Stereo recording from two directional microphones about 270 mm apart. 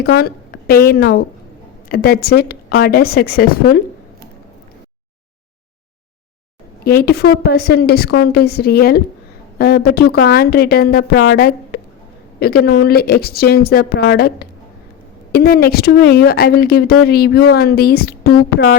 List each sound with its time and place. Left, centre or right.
0.0 s a woman's voice: left
6.8 s speech: left